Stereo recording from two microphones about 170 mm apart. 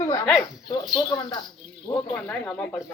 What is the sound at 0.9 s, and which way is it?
Speech, 25° left (ahead or behind).